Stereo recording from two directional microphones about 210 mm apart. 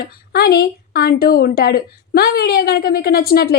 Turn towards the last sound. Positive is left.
turn(degrees=45)  # may be behind; listen again after turning